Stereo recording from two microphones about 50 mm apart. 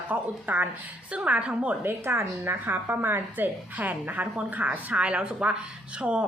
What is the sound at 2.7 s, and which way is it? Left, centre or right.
A woman's voice, right.